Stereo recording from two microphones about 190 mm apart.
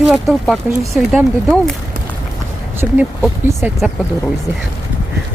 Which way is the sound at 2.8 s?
5° right (ahead or behind).